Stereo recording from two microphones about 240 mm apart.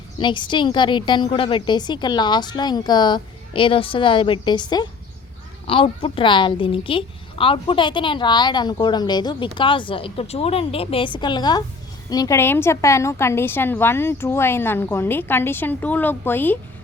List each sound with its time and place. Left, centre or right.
0.2 s a woman's voice: centre